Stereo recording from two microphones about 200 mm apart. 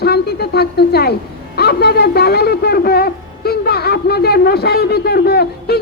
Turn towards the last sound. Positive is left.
turn(degrees=55)  # may be behind; listen again after turning